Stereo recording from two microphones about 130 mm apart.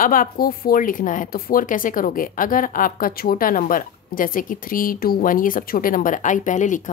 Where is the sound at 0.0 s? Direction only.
90° left.